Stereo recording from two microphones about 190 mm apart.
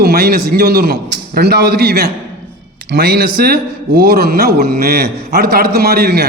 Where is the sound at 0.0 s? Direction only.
55° right (ahead or behind).